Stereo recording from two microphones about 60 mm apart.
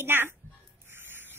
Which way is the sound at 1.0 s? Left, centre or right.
Right.